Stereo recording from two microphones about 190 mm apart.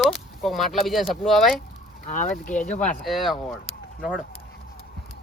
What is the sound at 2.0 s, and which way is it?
Speech, 45° left (ahead or behind).